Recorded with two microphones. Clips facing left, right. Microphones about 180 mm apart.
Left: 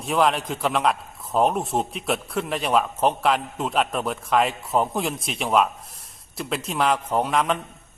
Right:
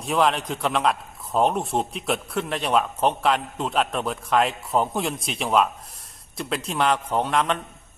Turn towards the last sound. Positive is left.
turn(degrees=0)  # may be behind; listen again after turning